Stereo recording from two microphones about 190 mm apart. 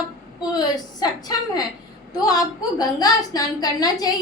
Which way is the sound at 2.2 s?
20° left (ahead or behind).